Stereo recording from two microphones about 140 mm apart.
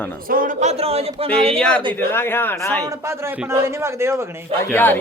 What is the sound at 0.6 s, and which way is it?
Speech, 50° right (ahead or behind).